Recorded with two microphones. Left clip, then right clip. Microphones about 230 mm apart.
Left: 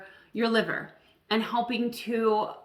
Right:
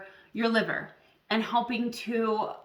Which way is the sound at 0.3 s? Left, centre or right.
Centre.